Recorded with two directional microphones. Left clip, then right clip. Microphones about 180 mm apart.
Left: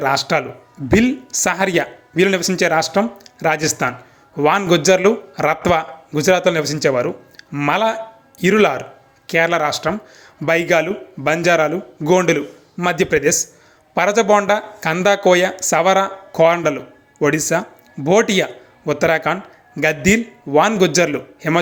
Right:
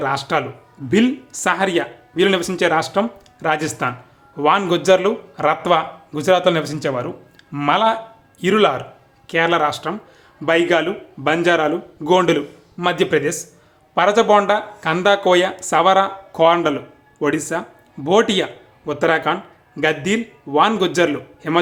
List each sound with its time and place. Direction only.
0.0 s a man's voice: 10° left (ahead or behind)